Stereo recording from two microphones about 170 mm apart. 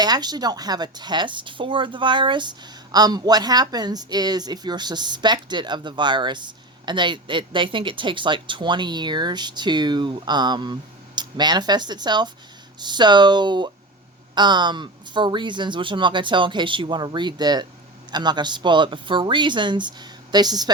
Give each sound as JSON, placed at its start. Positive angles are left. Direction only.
{"t": 0.0, "sound": "speech", "side_deg": -25}